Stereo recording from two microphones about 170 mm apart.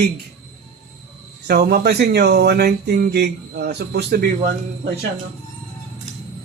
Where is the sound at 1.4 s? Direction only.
65° right (ahead or behind).